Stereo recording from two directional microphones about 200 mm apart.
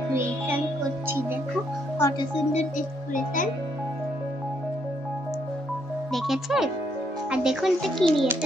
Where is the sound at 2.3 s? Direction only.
35° left (ahead or behind).